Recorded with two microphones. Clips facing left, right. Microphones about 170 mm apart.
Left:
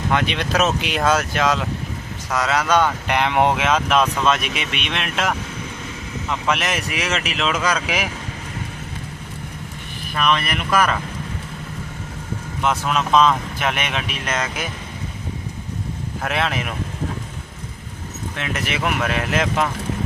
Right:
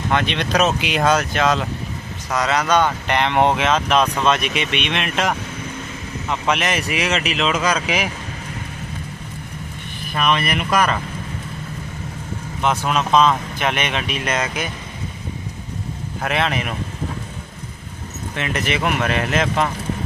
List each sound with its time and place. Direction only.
0.1 s speech: 5° left (ahead or behind)
6.5 s speech: centre (ahead or behind)
7.9 s speech: centre (ahead or behind)
10.2 s speech: 5° right (ahead or behind)
12.6 s speech: centre (ahead or behind)
16.2 s speech: centre (ahead or behind)
18.3 s speech: centre (ahead or behind)